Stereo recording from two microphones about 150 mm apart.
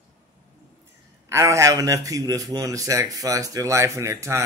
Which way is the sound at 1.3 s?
20° right (ahead or behind).